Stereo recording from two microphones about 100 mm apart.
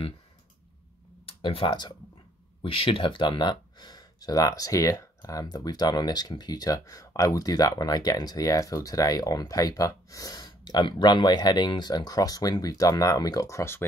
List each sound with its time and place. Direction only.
1.4 s speech: 60° left (ahead or behind); by 10.4 s 35° left (ahead or behind)
10.4 s speech: 50° left (ahead or behind); by 13.8 s 25° left (ahead or behind)